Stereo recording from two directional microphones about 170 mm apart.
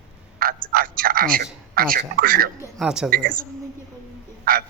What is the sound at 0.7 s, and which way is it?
A man's voice, 60° right (ahead or behind).